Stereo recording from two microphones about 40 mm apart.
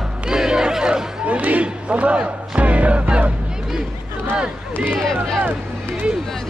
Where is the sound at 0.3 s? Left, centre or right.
Centre.